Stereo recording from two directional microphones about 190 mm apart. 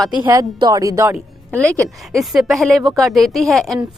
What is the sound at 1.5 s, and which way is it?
A woman's voice, 5° left (ahead or behind).